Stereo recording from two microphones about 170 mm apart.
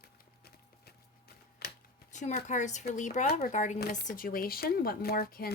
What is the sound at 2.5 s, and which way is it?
Speech, 45° left (ahead or behind).